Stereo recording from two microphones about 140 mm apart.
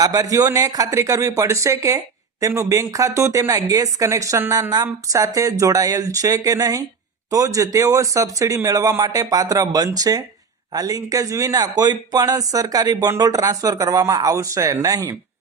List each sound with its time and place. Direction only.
0.0 s speech: 25° right (ahead or behind)